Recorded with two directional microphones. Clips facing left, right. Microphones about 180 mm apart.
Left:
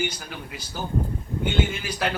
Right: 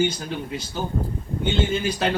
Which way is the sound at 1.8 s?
25° right (ahead or behind).